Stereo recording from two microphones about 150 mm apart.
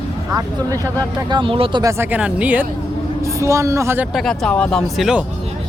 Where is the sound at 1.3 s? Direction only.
35° right (ahead or behind).